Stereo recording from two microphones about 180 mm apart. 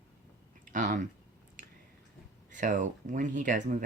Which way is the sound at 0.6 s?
45° right (ahead or behind).